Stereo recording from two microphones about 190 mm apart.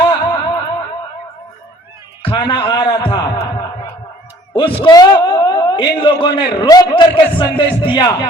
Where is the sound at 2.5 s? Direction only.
25° left (ahead or behind).